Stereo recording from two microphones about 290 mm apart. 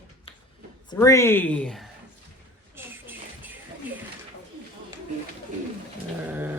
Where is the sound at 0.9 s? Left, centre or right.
Centre.